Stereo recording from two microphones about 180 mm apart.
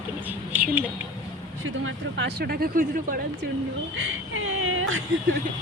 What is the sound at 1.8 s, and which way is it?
Speech, 75° right (ahead or behind).